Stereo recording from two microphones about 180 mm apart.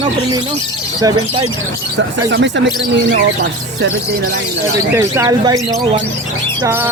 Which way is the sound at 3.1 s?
55° right (ahead or behind).